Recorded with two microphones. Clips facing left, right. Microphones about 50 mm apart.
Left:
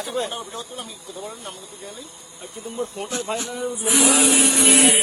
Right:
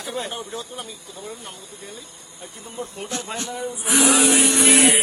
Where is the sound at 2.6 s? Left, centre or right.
Centre.